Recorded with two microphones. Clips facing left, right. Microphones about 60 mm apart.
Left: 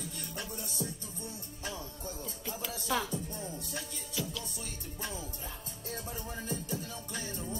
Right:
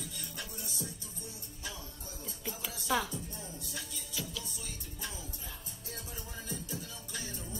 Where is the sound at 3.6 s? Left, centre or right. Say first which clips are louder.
Left 3 dB; left.